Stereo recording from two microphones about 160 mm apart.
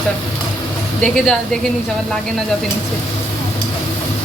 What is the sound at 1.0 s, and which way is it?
Speech, 5° left (ahead or behind).